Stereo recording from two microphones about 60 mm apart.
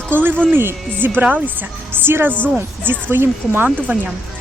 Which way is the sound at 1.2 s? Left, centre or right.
Right.